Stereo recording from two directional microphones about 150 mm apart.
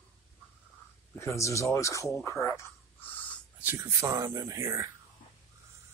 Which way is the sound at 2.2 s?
20° left (ahead or behind).